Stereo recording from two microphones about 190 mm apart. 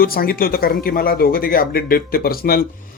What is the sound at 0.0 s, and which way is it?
Speech, 50° left (ahead or behind).